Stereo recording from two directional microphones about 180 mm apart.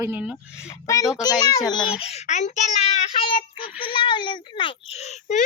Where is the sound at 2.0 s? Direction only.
35° left (ahead or behind).